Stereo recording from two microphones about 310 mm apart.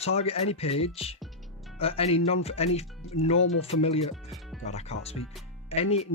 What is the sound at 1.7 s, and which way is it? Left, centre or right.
Speech, centre.